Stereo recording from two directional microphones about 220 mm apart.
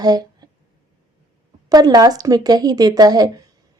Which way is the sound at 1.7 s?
20° right (ahead or behind).